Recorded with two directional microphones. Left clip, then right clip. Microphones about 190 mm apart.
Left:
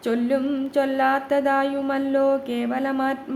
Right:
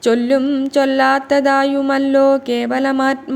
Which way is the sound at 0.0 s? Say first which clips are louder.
Right 8 dB; 30° right (ahead or behind).